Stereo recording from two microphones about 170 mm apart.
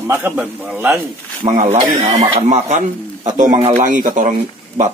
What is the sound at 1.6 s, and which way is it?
Speech, 40° right (ahead or behind).